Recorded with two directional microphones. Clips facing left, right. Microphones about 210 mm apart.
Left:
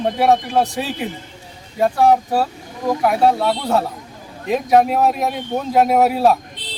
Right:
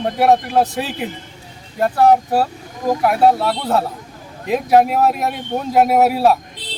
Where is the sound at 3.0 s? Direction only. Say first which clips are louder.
Right 1 dB; centre (ahead or behind).